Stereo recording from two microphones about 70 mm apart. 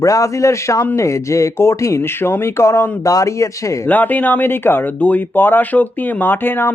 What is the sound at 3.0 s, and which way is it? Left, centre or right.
Speech, left.